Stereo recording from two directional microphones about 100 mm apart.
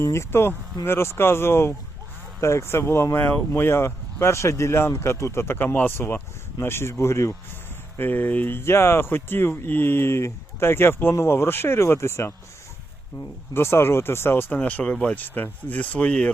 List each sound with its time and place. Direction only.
0.0 s speech: 25° left (ahead or behind)
13.5 s speech: 25° left (ahead or behind)